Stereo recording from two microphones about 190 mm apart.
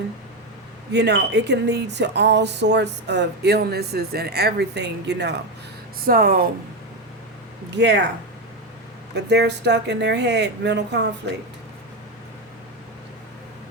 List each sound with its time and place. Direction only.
0.9 s speech: 65° right (ahead or behind)
6.1 s speech: 50° right (ahead or behind)
7.7 s speech: 65° right (ahead or behind)
9.1 s speech: 60° right (ahead or behind)